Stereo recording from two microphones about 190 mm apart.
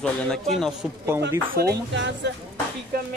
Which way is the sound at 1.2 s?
55° right (ahead or behind).